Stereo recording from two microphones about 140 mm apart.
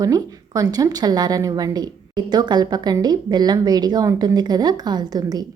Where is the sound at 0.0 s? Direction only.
25° right (ahead or behind).